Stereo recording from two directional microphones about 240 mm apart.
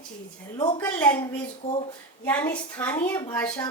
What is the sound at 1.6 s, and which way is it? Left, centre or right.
Speech, left.